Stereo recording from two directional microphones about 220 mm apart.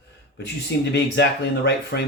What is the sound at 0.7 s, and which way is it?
Speech, 50° left (ahead or behind).